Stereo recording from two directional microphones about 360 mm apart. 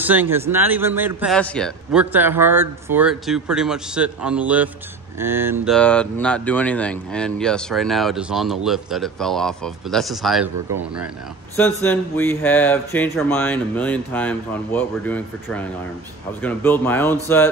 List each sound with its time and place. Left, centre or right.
0.0 s speech: centre
11.5 s speech: centre